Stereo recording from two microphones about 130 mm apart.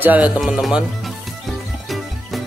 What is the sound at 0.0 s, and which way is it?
Speech, 15° right (ahead or behind).